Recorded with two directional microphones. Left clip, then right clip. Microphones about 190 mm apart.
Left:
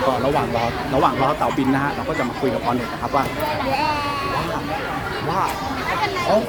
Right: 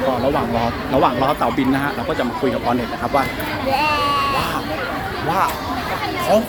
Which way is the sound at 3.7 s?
20° left (ahead or behind).